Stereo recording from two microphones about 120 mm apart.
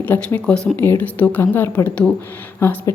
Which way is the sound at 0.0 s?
15° left (ahead or behind).